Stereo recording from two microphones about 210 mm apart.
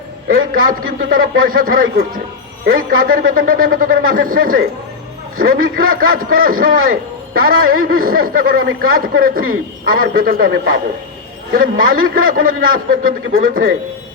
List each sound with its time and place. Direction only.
0.5 s a man's voice: 40° right (ahead or behind)
11.9 s a man's voice: 40° right (ahead or behind)